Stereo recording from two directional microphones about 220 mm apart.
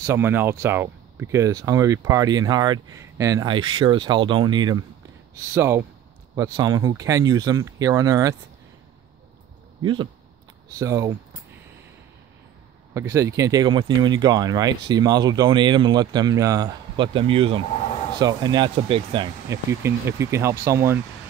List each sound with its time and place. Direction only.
0.0 s speech: 10° right (ahead or behind)
9.8 s speech: 20° right (ahead or behind)
12.9 s speech: 15° right (ahead or behind)
17.6 s a sound: 30° left (ahead or behind)
18.2 s speech: 20° right (ahead or behind)
19.8 s speech: 10° right (ahead or behind)